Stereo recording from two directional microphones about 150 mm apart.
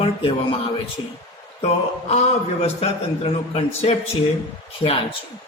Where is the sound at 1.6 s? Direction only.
45° left (ahead or behind).